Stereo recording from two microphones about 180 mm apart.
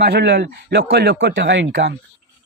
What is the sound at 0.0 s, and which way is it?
A man's voice, 65° right (ahead or behind).